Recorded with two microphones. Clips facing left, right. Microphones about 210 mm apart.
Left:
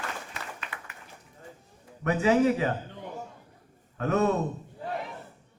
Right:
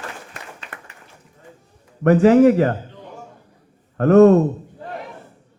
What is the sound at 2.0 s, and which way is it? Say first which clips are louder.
Speech: right 11 dB; 55° right (ahead or behind).